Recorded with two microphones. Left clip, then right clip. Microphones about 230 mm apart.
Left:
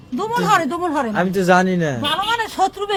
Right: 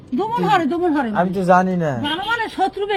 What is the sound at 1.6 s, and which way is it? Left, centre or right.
Speech, left.